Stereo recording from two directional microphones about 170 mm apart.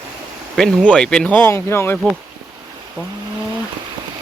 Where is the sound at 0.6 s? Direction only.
Centre (ahead or behind).